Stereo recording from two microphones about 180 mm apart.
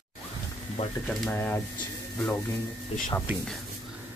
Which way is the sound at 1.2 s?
10° left (ahead or behind).